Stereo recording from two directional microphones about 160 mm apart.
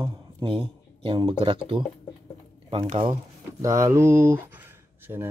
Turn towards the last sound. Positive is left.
turn(degrees=-15)  # may be behind; listen again after turning